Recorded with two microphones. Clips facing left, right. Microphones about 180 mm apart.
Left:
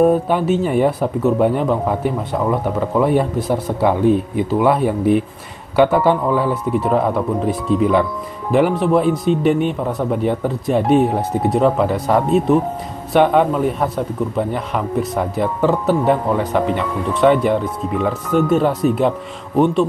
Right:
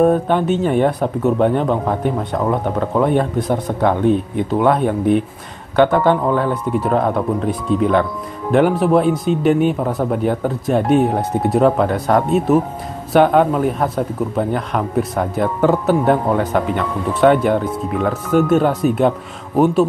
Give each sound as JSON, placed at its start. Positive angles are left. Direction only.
{"t": 0.0, "sound": "a man's voice", "side_deg": 5}